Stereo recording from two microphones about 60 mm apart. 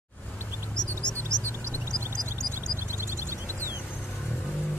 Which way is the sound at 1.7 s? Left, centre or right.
Right.